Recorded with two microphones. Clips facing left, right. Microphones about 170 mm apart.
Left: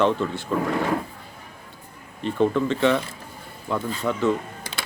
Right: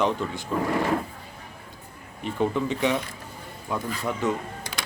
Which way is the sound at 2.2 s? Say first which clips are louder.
Left 4 dB; 15° right (ahead or behind).